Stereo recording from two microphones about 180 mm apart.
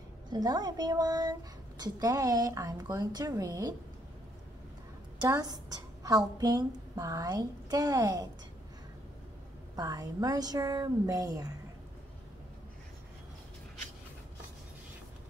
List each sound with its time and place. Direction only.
0.3 s a woman's voice: 20° right (ahead or behind)
5.2 s a woman's voice: 20° right (ahead or behind)
9.8 s a woman's voice: 20° right (ahead or behind)